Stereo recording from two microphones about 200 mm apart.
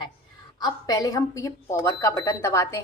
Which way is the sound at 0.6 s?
20° left (ahead or behind).